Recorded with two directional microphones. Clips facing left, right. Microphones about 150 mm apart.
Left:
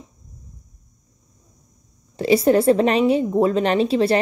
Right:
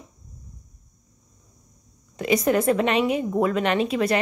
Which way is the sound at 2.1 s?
30° left (ahead or behind).